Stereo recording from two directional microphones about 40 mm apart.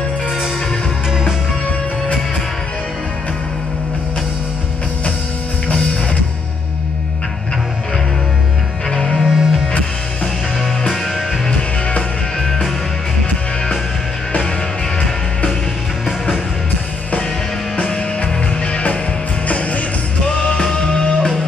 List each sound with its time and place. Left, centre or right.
8.9 s music: centre
9.2 s music: centre
17.8 s music: centre
19.4 s music: left
20.3 s music: left